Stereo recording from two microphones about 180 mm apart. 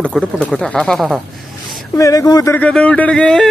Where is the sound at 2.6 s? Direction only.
5° left (ahead or behind).